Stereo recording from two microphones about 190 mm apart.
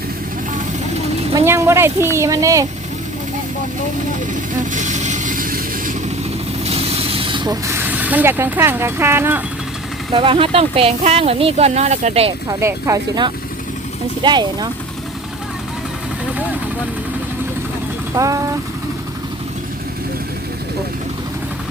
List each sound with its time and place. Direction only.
1.3 s speech: 15° right (ahead or behind)
4.3 s vehicle: 40° right (ahead or behind)
6.7 s speech: 30° right (ahead or behind); by 9.4 s 10° right (ahead or behind)
10.1 s speech: 30° right (ahead or behind)
12.5 s speech: 15° right (ahead or behind)
18.1 s speech: 15° right (ahead or behind)